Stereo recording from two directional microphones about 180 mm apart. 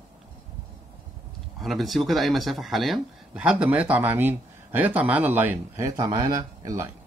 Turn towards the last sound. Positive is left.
turn(degrees=-15)  # may be behind; listen again after turning